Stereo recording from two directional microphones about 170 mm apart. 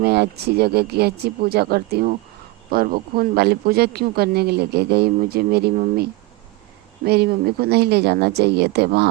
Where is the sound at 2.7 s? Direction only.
55° right (ahead or behind).